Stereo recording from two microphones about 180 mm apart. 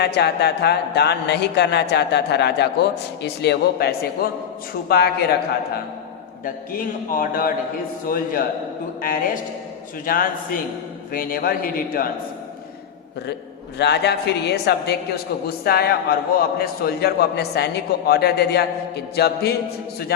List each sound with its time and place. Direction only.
0.0 s a man's voice: 65° left (ahead or behind)
6.4 s a man's voice: 50° left (ahead or behind)
13.7 s a man's voice: 70° left (ahead or behind)